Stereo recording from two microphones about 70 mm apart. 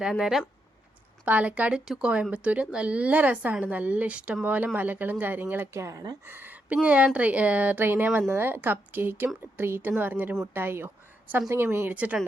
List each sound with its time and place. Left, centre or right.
0.0 s speech: centre
1.2 s speech: right
1.8 s speech: centre; by 5.8 s right
5.8 s speech: right
6.2 s speech: right